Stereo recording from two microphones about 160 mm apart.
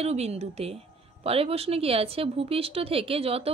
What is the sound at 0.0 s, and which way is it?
A woman's voice, 40° right (ahead or behind).